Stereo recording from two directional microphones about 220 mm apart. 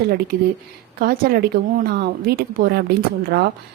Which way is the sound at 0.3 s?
45° right (ahead or behind).